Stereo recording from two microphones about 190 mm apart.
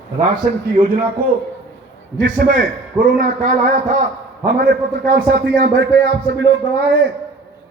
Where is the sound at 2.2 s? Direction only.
45° right (ahead or behind).